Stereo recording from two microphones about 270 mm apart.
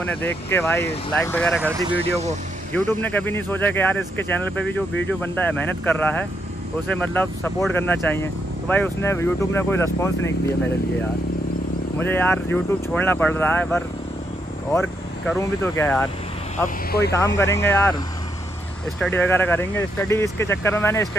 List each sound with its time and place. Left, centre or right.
0.0 s speech: centre
1.6 s speech: centre
2.0 s speech: right
2.9 s speech: centre
12.0 s speech: centre
16.6 s speech: left
17.1 s speech: centre
18.9 s speech: centre